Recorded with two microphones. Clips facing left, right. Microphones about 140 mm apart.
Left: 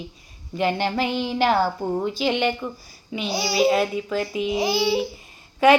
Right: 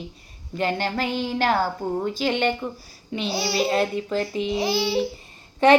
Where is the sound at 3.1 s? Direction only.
Centre (ahead or behind).